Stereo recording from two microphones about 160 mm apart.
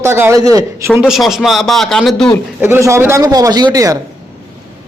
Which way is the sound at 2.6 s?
15° right (ahead or behind).